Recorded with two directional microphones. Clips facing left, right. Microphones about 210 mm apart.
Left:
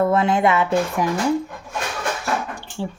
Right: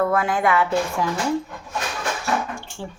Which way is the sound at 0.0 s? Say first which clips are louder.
Left 3 dB; 25° left (ahead or behind).